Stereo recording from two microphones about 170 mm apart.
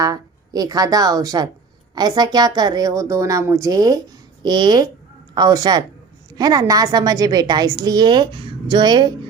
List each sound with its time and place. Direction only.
0.0 s a woman's voice: 20° right (ahead or behind)